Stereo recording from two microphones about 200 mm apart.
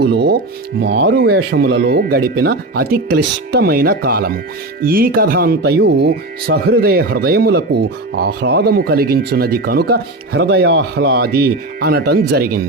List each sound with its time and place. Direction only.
0.0 s speech: 55° right (ahead or behind)